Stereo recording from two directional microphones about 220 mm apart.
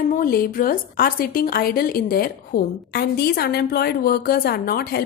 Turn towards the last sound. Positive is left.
turn(degrees=45)  # may be behind; listen again after turning